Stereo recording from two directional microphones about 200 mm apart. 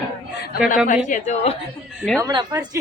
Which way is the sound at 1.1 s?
35° left (ahead or behind).